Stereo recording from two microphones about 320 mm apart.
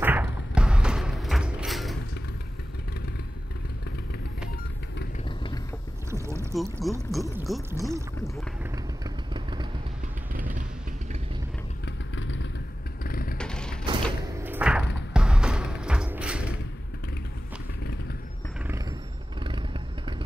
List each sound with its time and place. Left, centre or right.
0.0 s music: centre
6.0 s speech: centre
8.7 s vehicle: centre
11.8 s vehicle: left
13.4 s a sound: centre
19.4 s vehicle: centre